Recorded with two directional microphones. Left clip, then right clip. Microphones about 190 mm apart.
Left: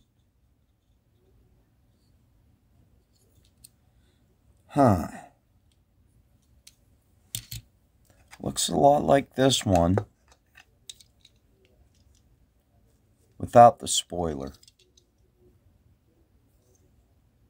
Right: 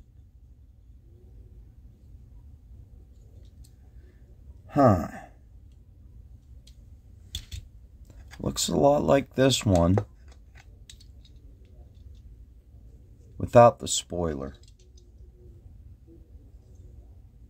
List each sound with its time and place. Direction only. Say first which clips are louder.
4.7 s a sound: right 1 dB; 20° left (ahead or behind)
8.1 s speech: right 1 dB; centre (ahead or behind)
13.4 s speech: left 2 dB; centre (ahead or behind)